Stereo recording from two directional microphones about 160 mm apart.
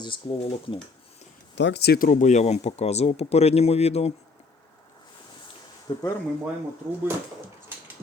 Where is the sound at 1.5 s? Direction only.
90° left; by 4.1 s 40° left (ahead or behind).